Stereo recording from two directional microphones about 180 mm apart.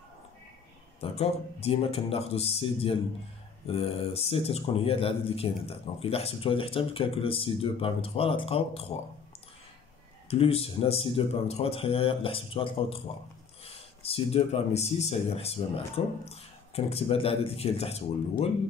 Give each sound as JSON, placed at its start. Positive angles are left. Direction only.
{"t": 1.0, "sound": "speech", "side_deg": 35}
{"t": 10.3, "sound": "speech", "side_deg": 35}